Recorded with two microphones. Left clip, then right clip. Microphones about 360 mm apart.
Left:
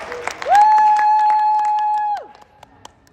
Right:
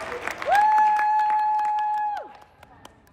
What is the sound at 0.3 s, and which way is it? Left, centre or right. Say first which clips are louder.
Applause: left 7 dB; left.